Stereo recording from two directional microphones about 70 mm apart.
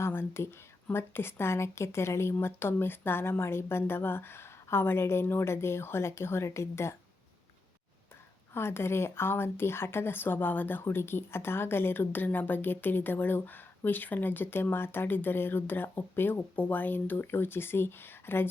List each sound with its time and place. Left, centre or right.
0.0 s a sound: left
0.9 s a woman's voice: left
8.5 s a woman's voice: left